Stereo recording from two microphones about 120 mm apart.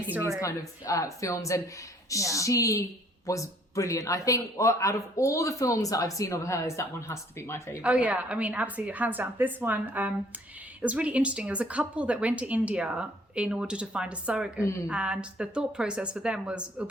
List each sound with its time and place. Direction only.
0.3 s a man's voice: 25° left (ahead or behind)
7.8 s a woman's voice: 10° right (ahead or behind)